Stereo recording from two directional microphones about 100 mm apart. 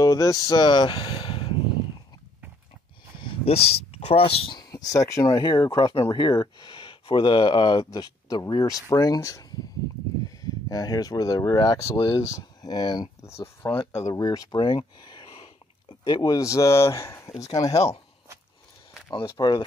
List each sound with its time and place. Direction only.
0.0 s speech: 35° left (ahead or behind); by 1.7 s 60° left (ahead or behind)
3.2 s speech: 70° left (ahead or behind)
4.6 s speech: 35° left (ahead or behind)
5.4 s speech: 50° left (ahead or behind)
6.1 s speech: 50° left (ahead or behind)
7.8 s speech: 40° left (ahead or behind)
13.2 s speech: 30° left (ahead or behind)
15.2 s a sound: 75° left (ahead or behind)
16.2 s speech: 35° left (ahead or behind)
19.4 s speech: 45° left (ahead or behind)